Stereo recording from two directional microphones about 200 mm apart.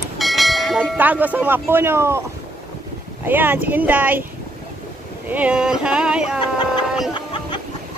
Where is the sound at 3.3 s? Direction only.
10° right (ahead or behind).